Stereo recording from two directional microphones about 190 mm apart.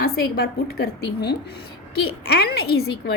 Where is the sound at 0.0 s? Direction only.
55° left (ahead or behind).